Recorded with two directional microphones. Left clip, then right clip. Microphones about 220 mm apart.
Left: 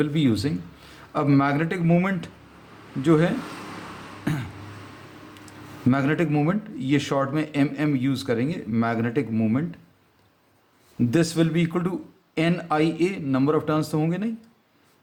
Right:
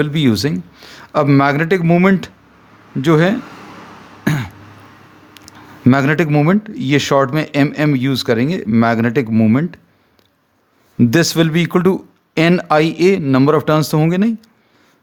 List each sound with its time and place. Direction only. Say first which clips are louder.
0.0 s speech: right 7 dB; 45° right (ahead or behind)
4.2 s throat clearing: right 10 dB; 40° right (ahead or behind)
5.5 s speech: right 10 dB; 45° right (ahead or behind)
11.1 s speech: right 7 dB; 45° right (ahead or behind)